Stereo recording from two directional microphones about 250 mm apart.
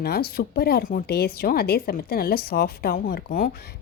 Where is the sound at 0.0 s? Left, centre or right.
Left.